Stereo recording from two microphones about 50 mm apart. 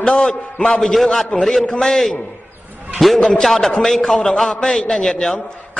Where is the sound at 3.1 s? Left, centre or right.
Centre.